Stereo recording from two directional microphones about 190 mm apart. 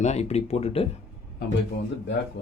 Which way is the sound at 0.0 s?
35° left (ahead or behind).